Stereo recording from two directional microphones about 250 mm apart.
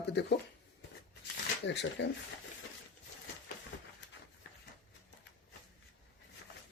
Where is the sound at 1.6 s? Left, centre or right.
Left.